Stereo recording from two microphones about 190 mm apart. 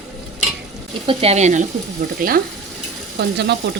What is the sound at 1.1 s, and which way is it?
Speech, 35° right (ahead or behind).